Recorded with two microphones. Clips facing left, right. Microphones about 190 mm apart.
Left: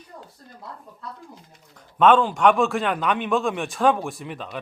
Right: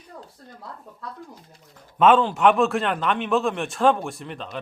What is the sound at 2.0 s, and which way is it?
A man's voice, 5° right (ahead or behind).